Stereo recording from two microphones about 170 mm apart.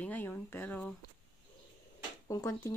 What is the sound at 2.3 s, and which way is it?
Speech, 20° left (ahead or behind).